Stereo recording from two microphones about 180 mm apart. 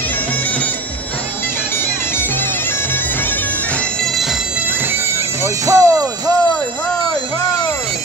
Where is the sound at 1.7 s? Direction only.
10° left (ahead or behind).